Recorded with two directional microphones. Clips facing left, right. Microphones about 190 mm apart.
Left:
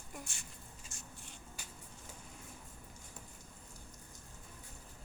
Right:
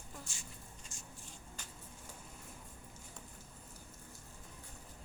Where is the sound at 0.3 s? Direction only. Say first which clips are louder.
Right 1 dB; 65° left (ahead or behind).